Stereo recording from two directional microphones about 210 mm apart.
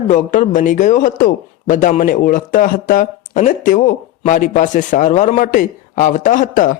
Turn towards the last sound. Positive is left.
turn(degrees=40)  # may be behind; listen again after turning